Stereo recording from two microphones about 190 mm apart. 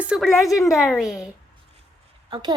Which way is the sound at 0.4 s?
15° left (ahead or behind).